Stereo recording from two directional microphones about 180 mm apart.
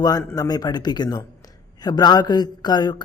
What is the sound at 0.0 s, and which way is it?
A man's voice, 20° left (ahead or behind).